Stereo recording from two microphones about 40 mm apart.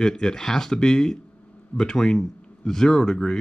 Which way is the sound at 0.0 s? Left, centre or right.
Centre.